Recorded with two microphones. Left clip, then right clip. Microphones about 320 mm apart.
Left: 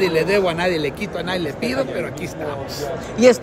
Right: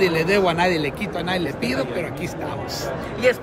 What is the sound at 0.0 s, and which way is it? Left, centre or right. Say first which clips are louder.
A man's voice: left 1 dB; centre.